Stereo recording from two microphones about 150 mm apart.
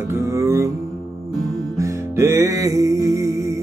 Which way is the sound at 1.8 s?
20° right (ahead or behind).